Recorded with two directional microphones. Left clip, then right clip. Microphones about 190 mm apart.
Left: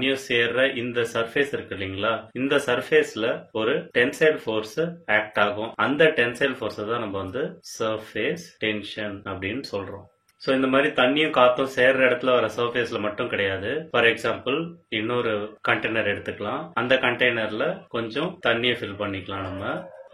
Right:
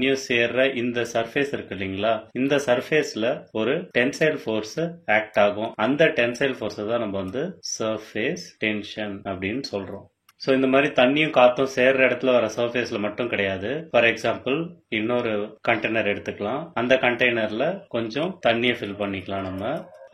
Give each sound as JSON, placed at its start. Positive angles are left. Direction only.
{"t": 0.0, "sound": "speech", "side_deg": -35}
{"t": 5.0, "sound": "speech", "side_deg": -40}